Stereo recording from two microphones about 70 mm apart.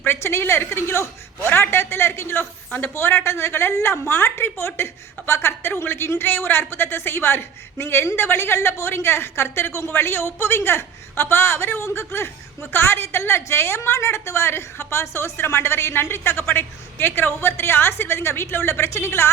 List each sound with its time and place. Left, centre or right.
0.0 s a woman's voice: left